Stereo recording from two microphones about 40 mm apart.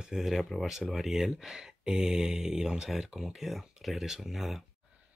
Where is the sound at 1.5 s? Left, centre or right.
Centre.